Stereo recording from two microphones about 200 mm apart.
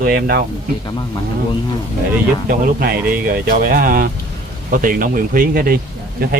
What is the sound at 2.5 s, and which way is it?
Speech, 50° right (ahead or behind).